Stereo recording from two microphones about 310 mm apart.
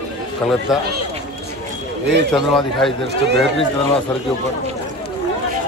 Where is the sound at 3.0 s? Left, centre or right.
Right.